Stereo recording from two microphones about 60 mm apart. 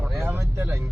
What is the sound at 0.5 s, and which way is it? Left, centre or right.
Speech, right.